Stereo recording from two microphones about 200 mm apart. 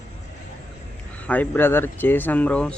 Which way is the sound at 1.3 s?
10° left (ahead or behind).